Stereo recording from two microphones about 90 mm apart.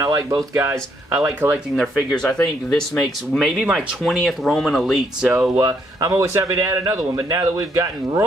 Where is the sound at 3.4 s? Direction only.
5° right (ahead or behind).